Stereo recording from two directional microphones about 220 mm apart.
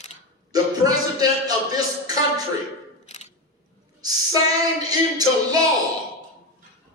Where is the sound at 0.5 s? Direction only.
15° right (ahead or behind).